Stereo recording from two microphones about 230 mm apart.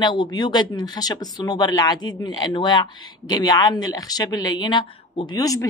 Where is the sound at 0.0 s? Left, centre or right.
Centre.